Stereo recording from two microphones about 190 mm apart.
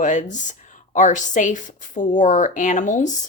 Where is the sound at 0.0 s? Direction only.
40° left (ahead or behind).